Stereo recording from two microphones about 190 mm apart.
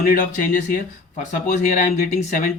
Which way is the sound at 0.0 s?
45° left (ahead or behind).